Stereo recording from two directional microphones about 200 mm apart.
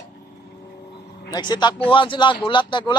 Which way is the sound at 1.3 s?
20° left (ahead or behind).